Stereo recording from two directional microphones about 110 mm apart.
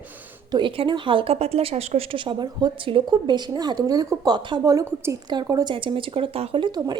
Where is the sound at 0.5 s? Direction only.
45° right (ahead or behind).